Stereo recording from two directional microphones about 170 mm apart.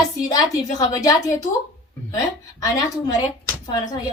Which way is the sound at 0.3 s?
20° left (ahead or behind).